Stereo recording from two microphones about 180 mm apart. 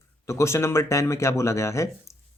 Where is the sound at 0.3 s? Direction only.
15° left (ahead or behind).